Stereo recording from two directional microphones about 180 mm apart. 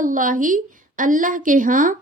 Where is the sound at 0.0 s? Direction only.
45° right (ahead or behind).